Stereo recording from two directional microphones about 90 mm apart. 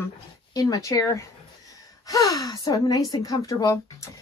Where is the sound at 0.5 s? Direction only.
45° left (ahead or behind).